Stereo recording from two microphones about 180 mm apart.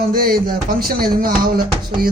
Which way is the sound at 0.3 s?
55° right (ahead or behind).